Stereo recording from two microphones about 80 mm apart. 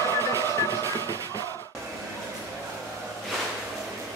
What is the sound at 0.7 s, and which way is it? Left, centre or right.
Music, right.